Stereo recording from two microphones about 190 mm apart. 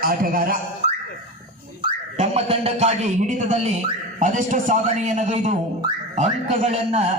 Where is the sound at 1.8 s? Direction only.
35° right (ahead or behind).